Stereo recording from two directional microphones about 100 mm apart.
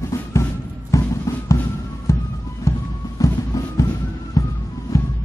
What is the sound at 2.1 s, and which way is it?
Music, 30° left (ahead or behind).